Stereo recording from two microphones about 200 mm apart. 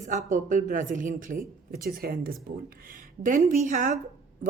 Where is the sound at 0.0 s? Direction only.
35° right (ahead or behind).